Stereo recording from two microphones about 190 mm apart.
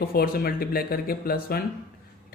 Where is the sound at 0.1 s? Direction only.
50° left (ahead or behind).